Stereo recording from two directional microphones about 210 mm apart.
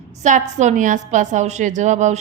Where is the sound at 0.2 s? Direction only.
35° right (ahead or behind).